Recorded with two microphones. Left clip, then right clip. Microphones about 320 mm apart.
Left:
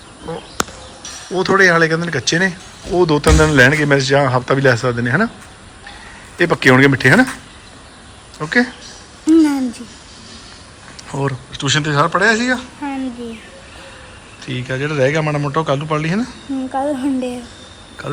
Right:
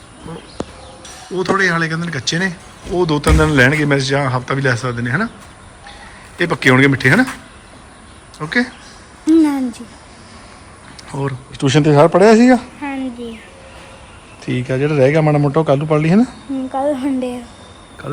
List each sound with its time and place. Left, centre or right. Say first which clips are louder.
1.4 s speech: left 4 dB; centre
6.3 s speech: left 1 dB; centre
8.4 s speech: left 2 dB; centre
9.2 s a sound: even; centre
11.1 s speech: left 2 dB; centre
11.6 s a man's voice: right 4 dB; centre
14.4 s speech: right 4 dB; centre